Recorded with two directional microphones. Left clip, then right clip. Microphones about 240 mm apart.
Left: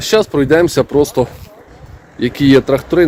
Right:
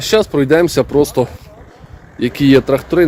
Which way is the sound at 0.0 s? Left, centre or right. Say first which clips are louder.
Left 1 dB; centre.